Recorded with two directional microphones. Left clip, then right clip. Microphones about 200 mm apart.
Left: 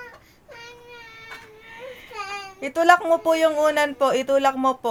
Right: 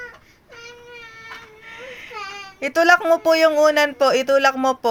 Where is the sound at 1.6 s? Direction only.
15° right (ahead or behind).